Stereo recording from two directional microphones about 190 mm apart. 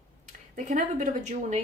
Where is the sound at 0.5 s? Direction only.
40° right (ahead or behind).